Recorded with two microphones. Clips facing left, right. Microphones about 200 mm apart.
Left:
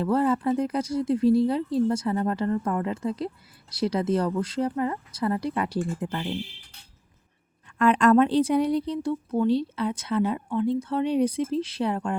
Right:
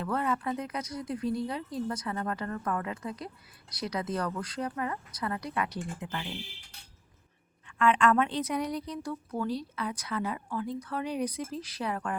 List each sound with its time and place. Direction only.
0.0 s speech: 30° left (ahead or behind)
7.8 s speech: 40° left (ahead or behind)